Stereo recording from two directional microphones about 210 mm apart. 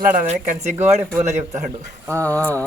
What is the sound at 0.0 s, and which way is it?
Speech, 40° right (ahead or behind).